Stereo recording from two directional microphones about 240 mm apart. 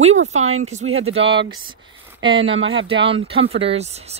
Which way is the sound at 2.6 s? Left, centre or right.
Right.